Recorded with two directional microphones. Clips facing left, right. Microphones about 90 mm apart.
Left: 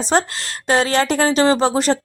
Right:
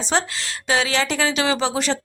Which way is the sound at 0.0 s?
45° left (ahead or behind).